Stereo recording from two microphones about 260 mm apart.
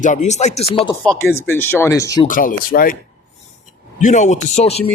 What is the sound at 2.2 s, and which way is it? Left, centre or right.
Speech, left.